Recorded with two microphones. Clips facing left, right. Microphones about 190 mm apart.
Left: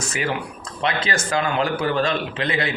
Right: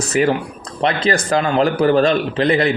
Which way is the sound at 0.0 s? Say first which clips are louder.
Right 9 dB; 40° right (ahead or behind).